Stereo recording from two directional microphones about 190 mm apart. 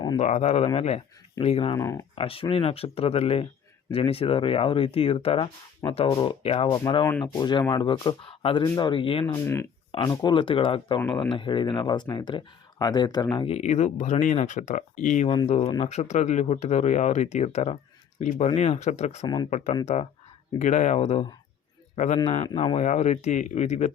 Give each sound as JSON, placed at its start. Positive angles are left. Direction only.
{"t": 0.2, "sound": "speech", "side_deg": 35}
{"t": 1.8, "sound": "speech", "side_deg": 15}
{"t": 2.1, "sound": "speech", "side_deg": 30}
{"t": 9.2, "sound": "speech", "side_deg": 15}
{"t": 19.2, "sound": "speech", "side_deg": 20}
{"t": 19.5, "sound": "a man's voice", "side_deg": 40}